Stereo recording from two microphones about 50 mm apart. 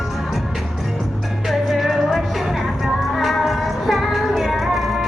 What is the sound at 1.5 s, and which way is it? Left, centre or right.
Music, centre.